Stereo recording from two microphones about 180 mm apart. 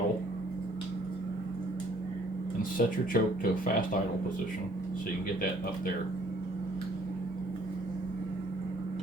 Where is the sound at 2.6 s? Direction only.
50° left (ahead or behind).